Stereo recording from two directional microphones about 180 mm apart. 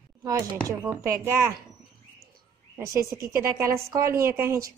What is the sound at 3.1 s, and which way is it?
Speech, 55° right (ahead or behind).